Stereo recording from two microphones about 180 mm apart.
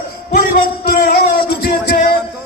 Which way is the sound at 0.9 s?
60° left (ahead or behind).